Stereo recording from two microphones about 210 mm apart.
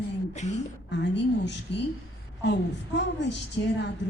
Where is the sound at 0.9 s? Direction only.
55° left (ahead or behind).